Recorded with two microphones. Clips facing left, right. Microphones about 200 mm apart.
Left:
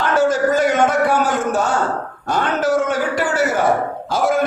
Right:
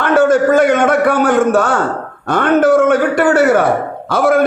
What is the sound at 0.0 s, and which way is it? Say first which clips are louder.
A man's voice: right 5 dB; 60° right (ahead or behind).